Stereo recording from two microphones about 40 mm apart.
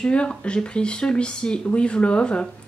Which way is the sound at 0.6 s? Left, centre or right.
Left.